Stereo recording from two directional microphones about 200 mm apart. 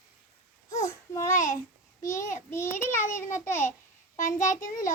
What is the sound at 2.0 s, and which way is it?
Child singing, 15° left (ahead or behind).